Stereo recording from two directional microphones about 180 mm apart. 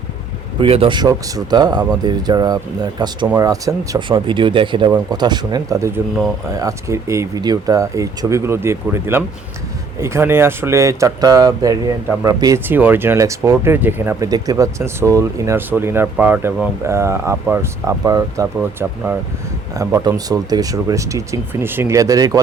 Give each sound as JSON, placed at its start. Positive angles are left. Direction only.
{"t": 0.6, "sound": "speech", "side_deg": -30}